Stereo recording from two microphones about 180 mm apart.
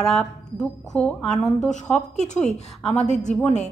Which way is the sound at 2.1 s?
40° left (ahead or behind).